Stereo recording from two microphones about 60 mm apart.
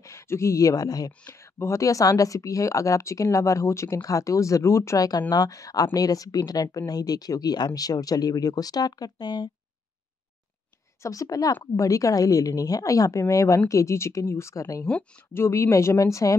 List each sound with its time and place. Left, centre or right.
0.0 s speech: left
1.3 s speech: left
11.0 s a woman's voice: left
11.6 s a woman's voice: left
15.3 s speech: left